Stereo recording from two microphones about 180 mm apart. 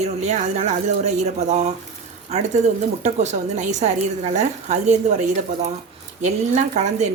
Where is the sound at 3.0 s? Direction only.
40° right (ahead or behind).